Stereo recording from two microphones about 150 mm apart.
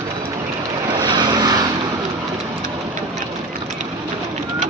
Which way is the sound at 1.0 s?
30° right (ahead or behind).